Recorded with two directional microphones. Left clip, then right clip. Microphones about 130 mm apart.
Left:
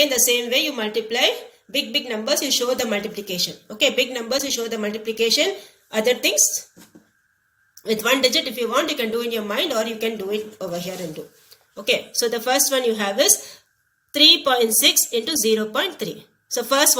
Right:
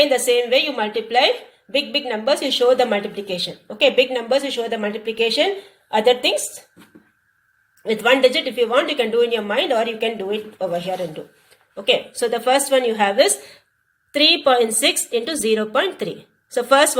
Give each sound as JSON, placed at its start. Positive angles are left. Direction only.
{"t": 0.1, "sound": "a woman's voice", "side_deg": -25}
{"t": 7.9, "sound": "a woman's voice", "side_deg": -25}